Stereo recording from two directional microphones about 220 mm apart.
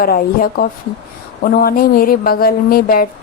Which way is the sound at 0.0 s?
40° left (ahead or behind).